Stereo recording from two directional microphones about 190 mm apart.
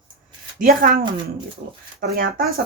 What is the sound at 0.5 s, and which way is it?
Speech, 50° right (ahead or behind).